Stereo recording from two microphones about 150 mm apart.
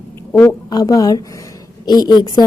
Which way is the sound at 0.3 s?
25° left (ahead or behind).